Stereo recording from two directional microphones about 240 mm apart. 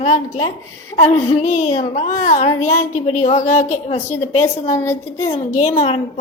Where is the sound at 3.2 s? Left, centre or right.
Left.